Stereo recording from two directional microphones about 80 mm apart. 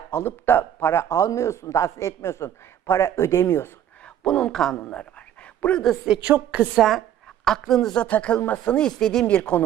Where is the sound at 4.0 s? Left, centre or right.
Centre.